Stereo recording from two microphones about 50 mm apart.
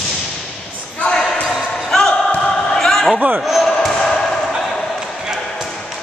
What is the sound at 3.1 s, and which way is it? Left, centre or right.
Speech, right.